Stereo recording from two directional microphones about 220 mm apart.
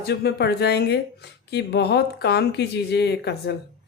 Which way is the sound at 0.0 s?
45° left (ahead or behind).